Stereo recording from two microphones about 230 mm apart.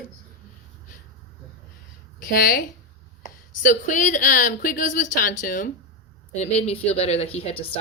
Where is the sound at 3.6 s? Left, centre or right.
Left.